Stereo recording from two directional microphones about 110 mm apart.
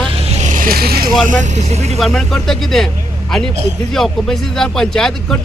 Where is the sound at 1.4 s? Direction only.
90° right.